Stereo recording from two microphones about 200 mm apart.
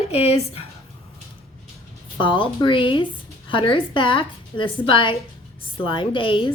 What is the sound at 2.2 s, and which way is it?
A woman's voice, 25° left (ahead or behind).